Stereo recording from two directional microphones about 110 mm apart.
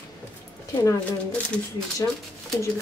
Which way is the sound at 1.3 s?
5° left (ahead or behind).